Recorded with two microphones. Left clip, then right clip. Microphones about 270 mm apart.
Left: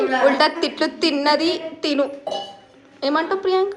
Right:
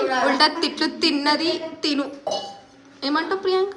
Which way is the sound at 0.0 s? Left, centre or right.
Centre.